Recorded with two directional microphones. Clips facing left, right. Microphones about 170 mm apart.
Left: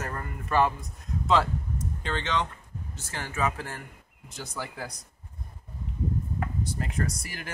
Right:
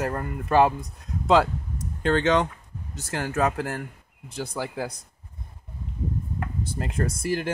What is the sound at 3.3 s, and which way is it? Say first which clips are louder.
Speech: right 5 dB; 55° right (ahead or behind).